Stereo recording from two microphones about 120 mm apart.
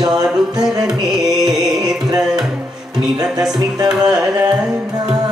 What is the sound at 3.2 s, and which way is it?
Music, 5° right (ahead or behind).